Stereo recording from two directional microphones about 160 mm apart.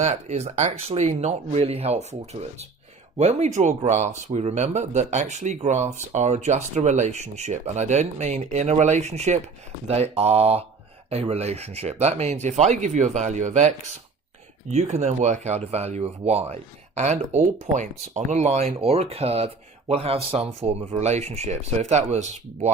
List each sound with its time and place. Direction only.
0.0 s speech: 45° right (ahead or behind)
3.2 s speech: 45° right (ahead or behind)